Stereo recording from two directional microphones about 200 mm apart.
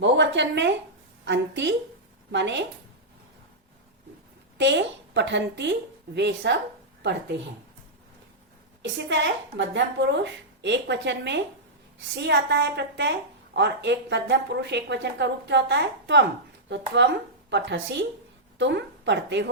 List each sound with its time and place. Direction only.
0.0 s a sound: 60° right (ahead or behind)
1.2 s a woman's voice: 65° right (ahead or behind)
4.5 s a woman's voice: 60° right (ahead or behind)
8.8 s a woman's voice: 60° right (ahead or behind)